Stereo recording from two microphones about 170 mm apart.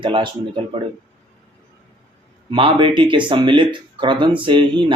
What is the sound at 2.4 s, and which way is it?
Speech, 30° right (ahead or behind).